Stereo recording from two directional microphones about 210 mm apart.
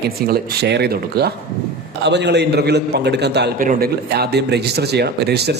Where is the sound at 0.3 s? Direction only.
50° right (ahead or behind).